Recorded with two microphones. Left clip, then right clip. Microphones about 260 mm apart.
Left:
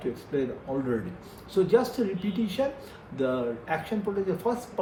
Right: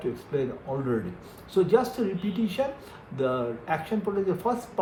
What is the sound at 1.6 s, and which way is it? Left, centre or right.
A man's voice, right.